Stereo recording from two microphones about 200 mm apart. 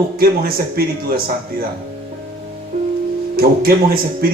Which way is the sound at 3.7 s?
50° right (ahead or behind).